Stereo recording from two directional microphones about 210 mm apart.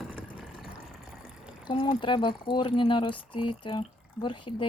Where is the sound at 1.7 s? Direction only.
25° left (ahead or behind).